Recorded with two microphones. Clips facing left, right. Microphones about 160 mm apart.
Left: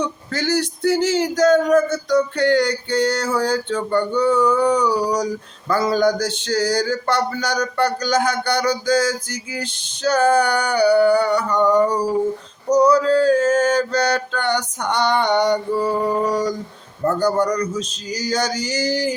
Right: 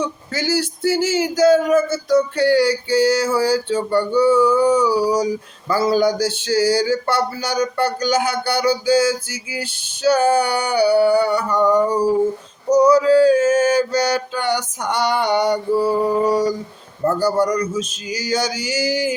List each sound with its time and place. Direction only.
0.0 s speech: 5° right (ahead or behind)